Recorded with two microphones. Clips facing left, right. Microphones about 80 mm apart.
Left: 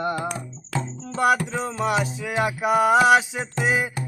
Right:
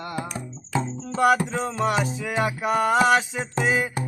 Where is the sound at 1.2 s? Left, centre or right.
Centre.